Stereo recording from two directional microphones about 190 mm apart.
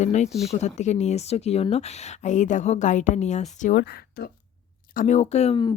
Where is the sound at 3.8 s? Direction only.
55° left (ahead or behind).